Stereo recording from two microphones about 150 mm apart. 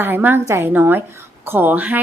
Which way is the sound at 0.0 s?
15° right (ahead or behind).